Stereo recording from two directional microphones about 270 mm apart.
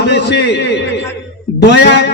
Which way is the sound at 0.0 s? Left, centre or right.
Left.